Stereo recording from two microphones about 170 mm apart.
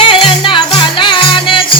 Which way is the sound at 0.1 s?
30° left (ahead or behind).